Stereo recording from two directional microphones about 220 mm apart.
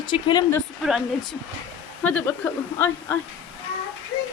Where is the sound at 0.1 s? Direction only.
20° left (ahead or behind).